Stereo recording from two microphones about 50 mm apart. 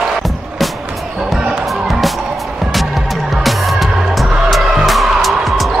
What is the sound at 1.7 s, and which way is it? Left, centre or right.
Music, centre.